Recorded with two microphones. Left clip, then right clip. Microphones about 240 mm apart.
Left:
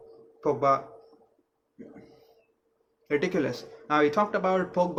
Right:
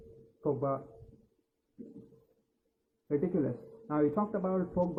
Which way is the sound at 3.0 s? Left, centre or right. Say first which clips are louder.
Left 5 dB; left.